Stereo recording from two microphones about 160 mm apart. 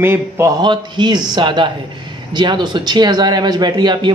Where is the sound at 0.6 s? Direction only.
30° right (ahead or behind).